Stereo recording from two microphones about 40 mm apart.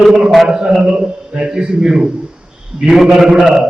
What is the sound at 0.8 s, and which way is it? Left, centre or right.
A man's voice, right.